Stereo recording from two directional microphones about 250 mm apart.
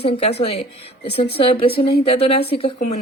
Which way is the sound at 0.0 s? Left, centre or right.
Left.